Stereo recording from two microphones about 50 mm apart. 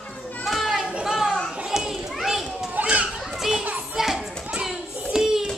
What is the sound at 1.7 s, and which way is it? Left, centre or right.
Children playing, centre.